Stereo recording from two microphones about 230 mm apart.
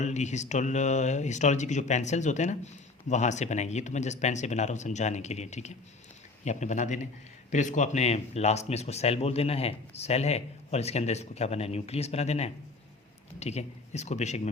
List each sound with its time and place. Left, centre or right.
0.0 s speech: left